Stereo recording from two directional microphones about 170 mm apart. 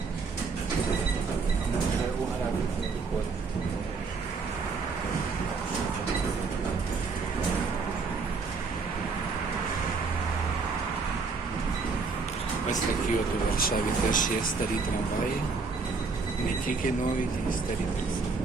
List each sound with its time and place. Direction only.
13.6 s speech: 55° left (ahead or behind)